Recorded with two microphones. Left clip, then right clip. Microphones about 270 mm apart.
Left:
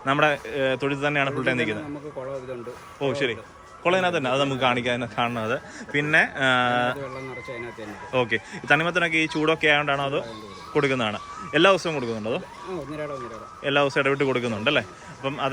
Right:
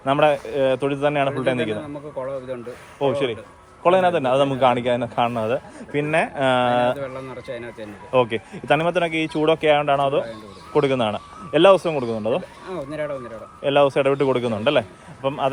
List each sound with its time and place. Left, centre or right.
0.0 s a man's voice: centre
3.0 s a man's voice: centre
7.4 s speech: centre
8.1 s a man's voice: centre
13.6 s a man's voice: centre